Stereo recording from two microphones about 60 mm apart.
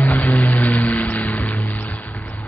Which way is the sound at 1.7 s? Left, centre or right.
Left.